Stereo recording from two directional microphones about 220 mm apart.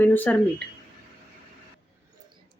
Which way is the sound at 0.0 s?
10° left (ahead or behind).